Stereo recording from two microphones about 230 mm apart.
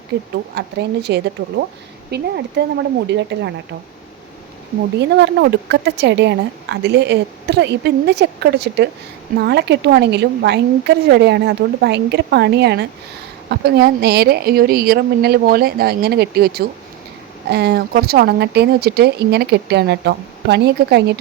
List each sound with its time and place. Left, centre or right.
0.5 s a woman's voice: right
4.9 s a woman's voice: right